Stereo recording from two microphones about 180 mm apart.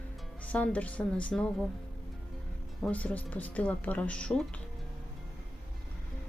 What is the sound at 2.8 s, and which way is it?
Speech, 10° left (ahead or behind).